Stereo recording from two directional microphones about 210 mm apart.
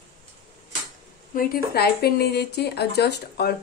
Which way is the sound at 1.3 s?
45° left (ahead or behind).